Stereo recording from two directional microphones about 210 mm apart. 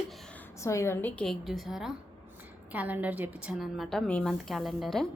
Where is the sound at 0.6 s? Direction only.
15° left (ahead or behind).